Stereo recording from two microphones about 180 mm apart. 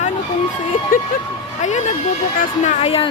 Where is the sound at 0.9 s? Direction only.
50° left (ahead or behind).